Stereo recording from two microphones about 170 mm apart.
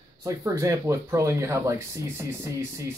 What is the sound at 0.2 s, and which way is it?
Speech, 15° right (ahead or behind).